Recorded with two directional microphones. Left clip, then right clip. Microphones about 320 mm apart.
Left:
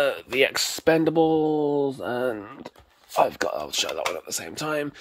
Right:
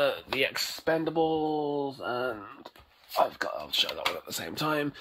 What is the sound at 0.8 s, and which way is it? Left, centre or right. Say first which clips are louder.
Speech: left 7 dB; left.